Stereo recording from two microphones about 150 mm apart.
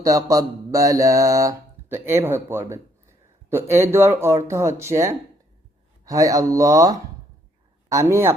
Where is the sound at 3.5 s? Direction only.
15° right (ahead or behind).